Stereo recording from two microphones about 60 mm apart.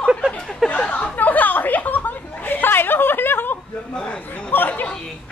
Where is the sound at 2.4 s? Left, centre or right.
Left.